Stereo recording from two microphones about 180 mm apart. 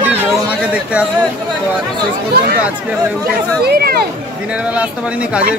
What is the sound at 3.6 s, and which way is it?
Speech, 60° right (ahead or behind).